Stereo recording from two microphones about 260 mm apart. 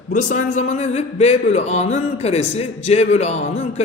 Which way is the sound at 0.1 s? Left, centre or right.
Left.